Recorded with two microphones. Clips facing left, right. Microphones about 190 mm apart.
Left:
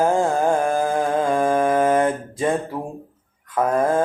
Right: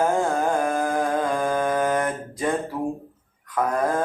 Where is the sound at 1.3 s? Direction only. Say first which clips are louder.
Left 5 dB; 25° left (ahead or behind).